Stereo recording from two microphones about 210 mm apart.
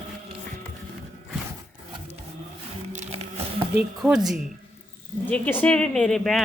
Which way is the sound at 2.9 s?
30° right (ahead or behind).